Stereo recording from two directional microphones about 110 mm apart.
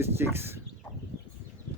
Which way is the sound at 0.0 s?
20° right (ahead or behind).